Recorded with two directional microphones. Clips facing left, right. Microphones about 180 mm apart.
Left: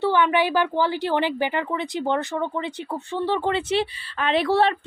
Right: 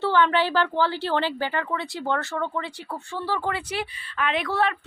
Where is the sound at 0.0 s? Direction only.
15° left (ahead or behind).